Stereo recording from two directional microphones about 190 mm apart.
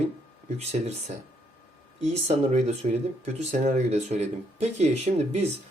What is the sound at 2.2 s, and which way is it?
Speech, 35° right (ahead or behind).